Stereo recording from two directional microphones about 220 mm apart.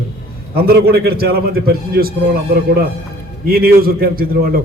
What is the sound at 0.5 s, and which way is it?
A man's voice, 45° right (ahead or behind).